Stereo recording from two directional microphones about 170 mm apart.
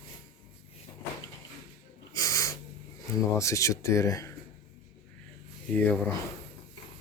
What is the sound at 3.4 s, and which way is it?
Speech, 20° left (ahead or behind).